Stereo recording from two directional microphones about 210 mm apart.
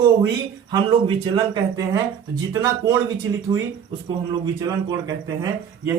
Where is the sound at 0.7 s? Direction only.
20° right (ahead or behind).